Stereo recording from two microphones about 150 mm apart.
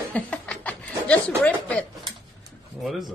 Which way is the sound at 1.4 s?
5° left (ahead or behind).